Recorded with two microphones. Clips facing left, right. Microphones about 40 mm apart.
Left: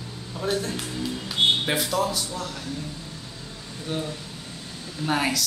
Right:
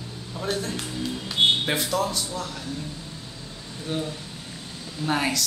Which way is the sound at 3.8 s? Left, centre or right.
Centre.